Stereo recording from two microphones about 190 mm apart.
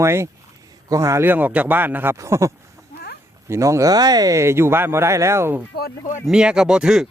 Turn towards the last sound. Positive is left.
turn(degrees=-5)  # may be behind; listen again after turning